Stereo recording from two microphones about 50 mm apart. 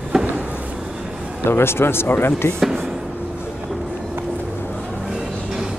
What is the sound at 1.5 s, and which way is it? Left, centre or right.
Speech, left.